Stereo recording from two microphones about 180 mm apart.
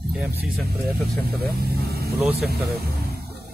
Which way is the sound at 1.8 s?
60° right (ahead or behind).